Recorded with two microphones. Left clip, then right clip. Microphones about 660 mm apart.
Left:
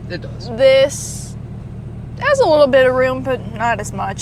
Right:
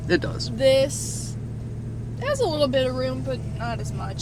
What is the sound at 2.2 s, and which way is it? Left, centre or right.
Speech, left.